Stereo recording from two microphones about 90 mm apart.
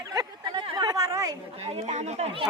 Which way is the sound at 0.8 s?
45° right (ahead or behind).